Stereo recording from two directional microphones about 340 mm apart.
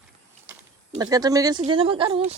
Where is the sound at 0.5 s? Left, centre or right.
Centre.